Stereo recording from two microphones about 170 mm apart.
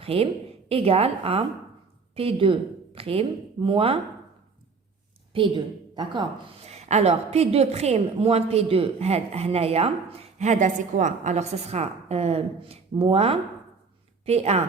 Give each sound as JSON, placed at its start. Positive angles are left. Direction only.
{"t": 0.0, "sound": "a woman's voice", "side_deg": -35}
{"t": 5.3, "sound": "a woman's voice", "side_deg": -30}
{"t": 6.7, "sound": "a woman's voice", "side_deg": -40}